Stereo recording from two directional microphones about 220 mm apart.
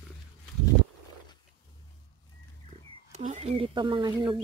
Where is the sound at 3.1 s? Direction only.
30° right (ahead or behind).